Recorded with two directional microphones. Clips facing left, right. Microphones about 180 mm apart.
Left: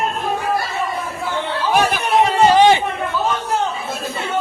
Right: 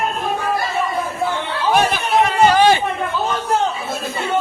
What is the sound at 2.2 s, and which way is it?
Chatter, 25° left (ahead or behind).